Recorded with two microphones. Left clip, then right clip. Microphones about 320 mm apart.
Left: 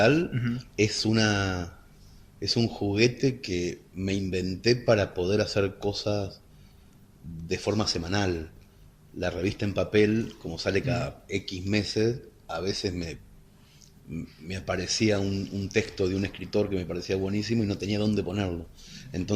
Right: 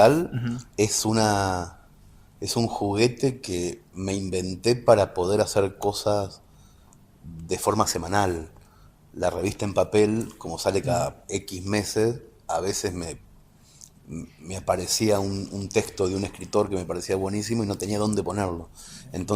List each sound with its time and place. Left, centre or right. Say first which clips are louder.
0.0 s speech: right 5 dB; centre
7.4 s speech: right 5 dB; centre
13.7 s a sound: right 1 dB; centre
14.4 s speech: right 5 dB; centre
18.3 s speech: right 4 dB; right
18.9 s a sound: right 1 dB; centre